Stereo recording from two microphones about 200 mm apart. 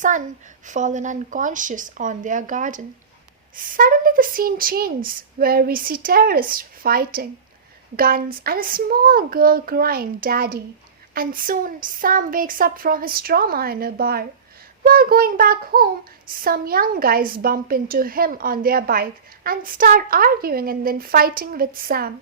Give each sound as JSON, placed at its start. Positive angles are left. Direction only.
{"t": 0.6, "sound": "speech", "side_deg": -40}